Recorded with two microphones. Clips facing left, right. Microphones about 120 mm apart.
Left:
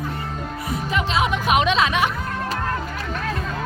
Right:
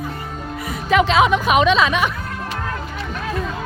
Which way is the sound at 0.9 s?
90° right.